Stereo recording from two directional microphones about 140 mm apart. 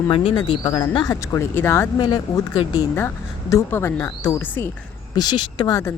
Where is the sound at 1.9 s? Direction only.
30° left (ahead or behind).